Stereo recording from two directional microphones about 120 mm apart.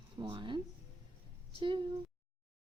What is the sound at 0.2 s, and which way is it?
A woman's voice, 40° right (ahead or behind).